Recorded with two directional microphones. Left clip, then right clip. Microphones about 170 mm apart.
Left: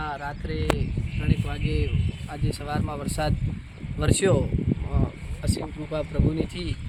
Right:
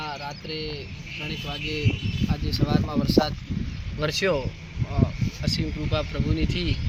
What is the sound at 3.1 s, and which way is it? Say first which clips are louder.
Speech: right 7 dB; 45° left (ahead or behind).